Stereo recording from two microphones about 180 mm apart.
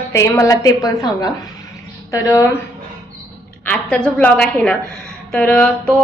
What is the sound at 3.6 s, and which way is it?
A woman's voice, 5° left (ahead or behind).